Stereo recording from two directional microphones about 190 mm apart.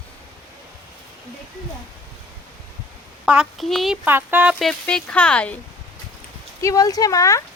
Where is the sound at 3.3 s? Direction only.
Centre (ahead or behind).